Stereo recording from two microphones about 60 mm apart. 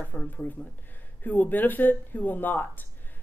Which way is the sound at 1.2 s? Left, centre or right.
Left.